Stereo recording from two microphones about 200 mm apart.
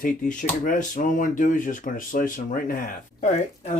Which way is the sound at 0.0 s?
40° left (ahead or behind).